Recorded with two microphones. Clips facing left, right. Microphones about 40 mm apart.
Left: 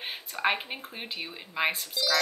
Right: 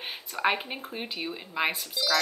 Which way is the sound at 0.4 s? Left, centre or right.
Centre.